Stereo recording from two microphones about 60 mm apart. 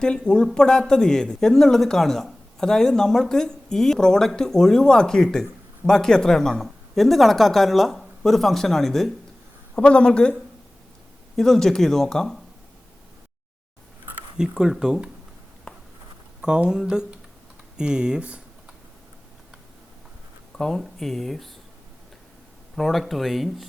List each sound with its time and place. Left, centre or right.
0.0 s a woman's voice: centre
9.7 s a woman's voice: centre
11.3 s a woman's voice: centre
14.3 s speech: centre
16.4 s speech: centre
20.6 s speech: centre
22.7 s speech: centre